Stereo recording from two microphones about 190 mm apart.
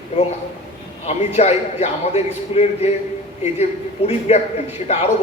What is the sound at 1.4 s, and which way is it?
A man's voice, 35° left (ahead or behind).